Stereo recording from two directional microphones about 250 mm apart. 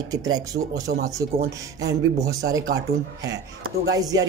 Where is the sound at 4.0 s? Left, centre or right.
Centre.